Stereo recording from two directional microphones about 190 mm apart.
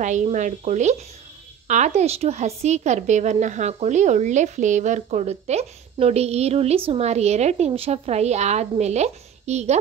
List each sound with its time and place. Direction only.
0.0 s a woman's voice: 40° right (ahead or behind)